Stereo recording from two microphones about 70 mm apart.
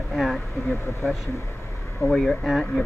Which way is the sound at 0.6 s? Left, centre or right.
Left.